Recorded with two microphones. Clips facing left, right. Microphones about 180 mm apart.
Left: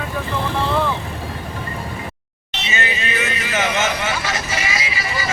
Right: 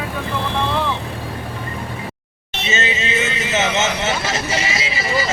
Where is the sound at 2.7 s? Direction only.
25° right (ahead or behind).